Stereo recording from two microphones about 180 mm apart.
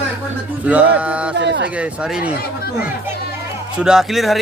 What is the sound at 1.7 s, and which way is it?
Speech, 5° right (ahead or behind).